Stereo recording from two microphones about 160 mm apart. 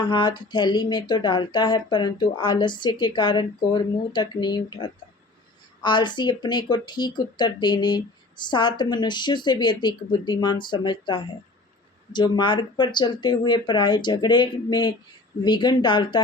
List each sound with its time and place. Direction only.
0.0 s speech: 30° left (ahead or behind)